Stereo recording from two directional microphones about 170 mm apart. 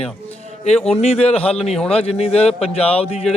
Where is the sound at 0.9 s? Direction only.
40° left (ahead or behind).